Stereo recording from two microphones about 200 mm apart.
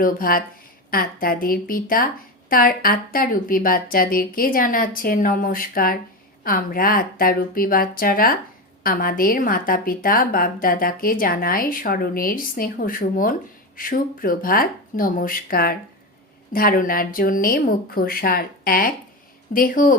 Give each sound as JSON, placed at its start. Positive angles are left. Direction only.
{"t": 0.0, "sound": "a woman's voice", "side_deg": 45}